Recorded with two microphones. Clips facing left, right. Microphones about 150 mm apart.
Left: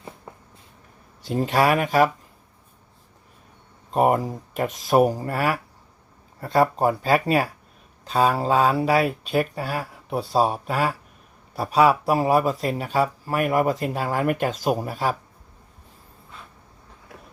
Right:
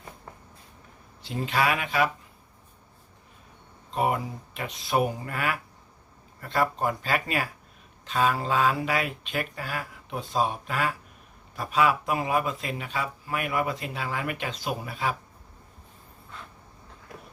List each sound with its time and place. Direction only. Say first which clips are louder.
1.2 s speech: left 6 dB; 40° left (ahead or behind)
3.9 s speech: left 7 dB; 45° left (ahead or behind)